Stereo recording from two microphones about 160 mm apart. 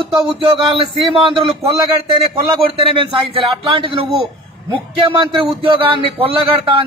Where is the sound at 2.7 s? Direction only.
35° right (ahead or behind).